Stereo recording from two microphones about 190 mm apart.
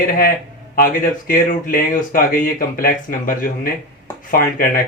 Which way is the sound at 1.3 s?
45° left (ahead or behind).